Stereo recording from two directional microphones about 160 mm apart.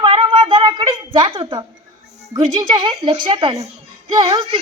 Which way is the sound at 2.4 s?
25° right (ahead or behind).